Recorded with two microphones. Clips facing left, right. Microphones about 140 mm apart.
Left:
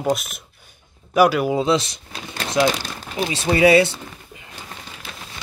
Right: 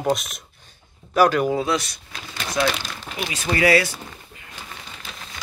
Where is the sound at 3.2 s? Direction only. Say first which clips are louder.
Left 5 dB; 30° left (ahead or behind).